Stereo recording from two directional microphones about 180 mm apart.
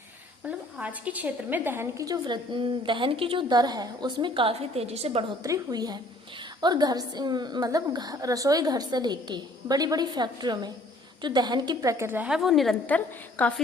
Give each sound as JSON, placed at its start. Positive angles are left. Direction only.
{"t": 0.4, "sound": "a woman's voice", "side_deg": -5}
{"t": 5.4, "sound": "a woman's voice", "side_deg": -20}